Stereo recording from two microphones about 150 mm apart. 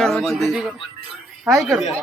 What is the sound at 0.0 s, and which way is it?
Speech, 5° left (ahead or behind).